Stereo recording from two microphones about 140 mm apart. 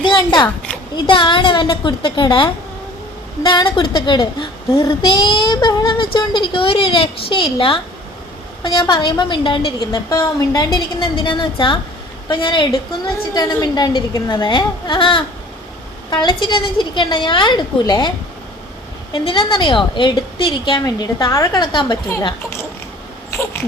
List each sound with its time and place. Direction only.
0.0 s a child's voice: 30° left (ahead or behind)
19.1 s a woman's voice: 35° left (ahead or behind)